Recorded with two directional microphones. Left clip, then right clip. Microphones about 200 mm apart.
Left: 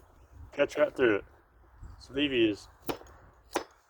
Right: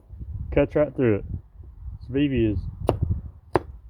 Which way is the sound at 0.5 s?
30° right (ahead or behind).